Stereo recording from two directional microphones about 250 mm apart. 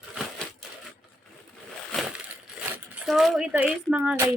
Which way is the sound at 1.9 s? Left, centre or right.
Centre.